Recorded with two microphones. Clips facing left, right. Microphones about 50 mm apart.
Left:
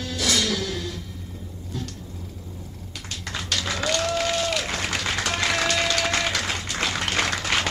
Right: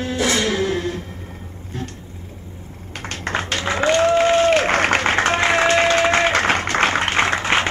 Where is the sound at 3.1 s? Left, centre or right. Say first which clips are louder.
Right 7 dB; right.